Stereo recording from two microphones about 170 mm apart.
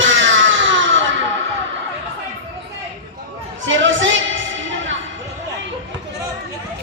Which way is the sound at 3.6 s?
90° right.